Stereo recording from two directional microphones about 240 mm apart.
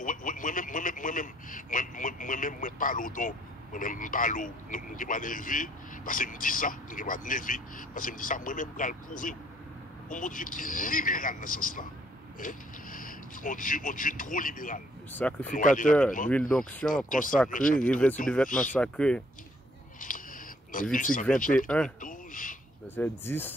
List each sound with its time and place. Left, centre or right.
0.0 s a sound: left
3.2 s speech: left
15.2 s speech: centre
15.5 s speech: left
16.3 s speech: centre
16.9 s speech: left
18.6 s speech: centre
20.0 s a sound: left
20.9 s speech: left
21.5 s speech: centre
22.0 s a sound: left
22.9 s speech: centre